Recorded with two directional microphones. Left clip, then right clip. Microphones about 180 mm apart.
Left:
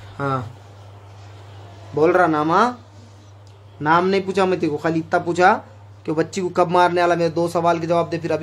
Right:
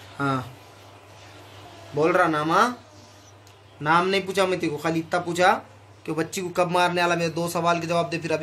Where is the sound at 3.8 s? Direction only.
60° left (ahead or behind).